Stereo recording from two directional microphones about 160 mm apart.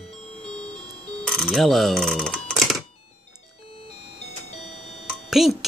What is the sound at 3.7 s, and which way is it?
Music, 35° left (ahead or behind).